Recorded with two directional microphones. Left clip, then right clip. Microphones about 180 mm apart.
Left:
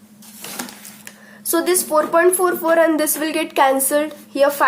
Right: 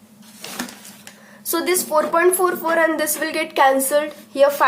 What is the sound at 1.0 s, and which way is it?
Speech, 15° left (ahead or behind).